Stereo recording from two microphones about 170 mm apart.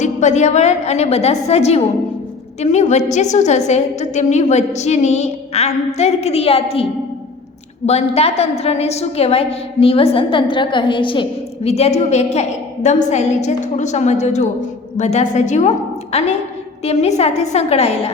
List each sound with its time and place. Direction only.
0.0 s a woman's voice: 45° left (ahead or behind)
7.9 s a woman's voice: 40° left (ahead or behind)